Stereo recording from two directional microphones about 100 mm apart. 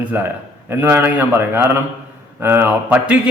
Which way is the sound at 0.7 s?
20° right (ahead or behind).